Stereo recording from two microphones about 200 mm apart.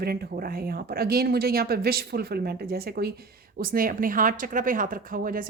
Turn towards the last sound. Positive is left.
turn(degrees=-45)  # may be behind; listen again after turning